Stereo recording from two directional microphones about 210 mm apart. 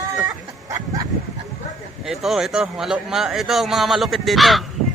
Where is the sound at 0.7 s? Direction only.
15° right (ahead or behind).